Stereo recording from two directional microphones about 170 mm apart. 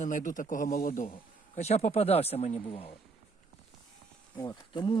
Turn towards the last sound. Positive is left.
turn(degrees=30)  # may be behind; listen again after turning